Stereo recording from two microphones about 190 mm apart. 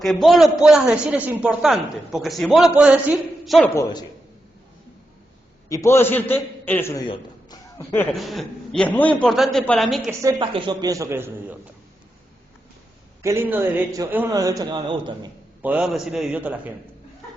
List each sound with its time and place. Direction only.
0.0 s a man's voice: centre (ahead or behind)
5.6 s a man's voice: 15° left (ahead or behind)
7.1 s a sound: 20° left (ahead or behind)
8.1 s a man's voice: centre (ahead or behind)
10.1 s a man's voice: 20° right (ahead or behind)
13.2 s a man's voice: 15° right (ahead or behind)
15.6 s a man's voice: 5° right (ahead or behind)